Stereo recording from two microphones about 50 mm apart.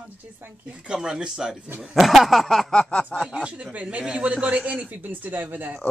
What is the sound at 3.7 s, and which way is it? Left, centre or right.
A man's voice, right.